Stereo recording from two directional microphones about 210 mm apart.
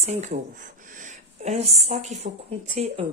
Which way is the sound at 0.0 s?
35° right (ahead or behind).